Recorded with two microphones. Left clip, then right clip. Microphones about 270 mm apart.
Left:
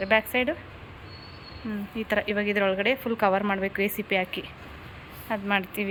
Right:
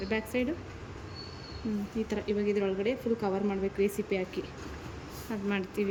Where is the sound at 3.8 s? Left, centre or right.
Centre.